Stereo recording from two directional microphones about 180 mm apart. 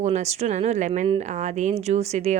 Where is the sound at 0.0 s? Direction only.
40° right (ahead or behind).